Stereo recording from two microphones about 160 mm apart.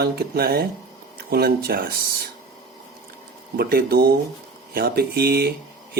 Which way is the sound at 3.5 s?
75° right (ahead or behind).